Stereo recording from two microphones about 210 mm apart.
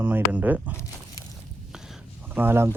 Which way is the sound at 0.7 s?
15° left (ahead or behind).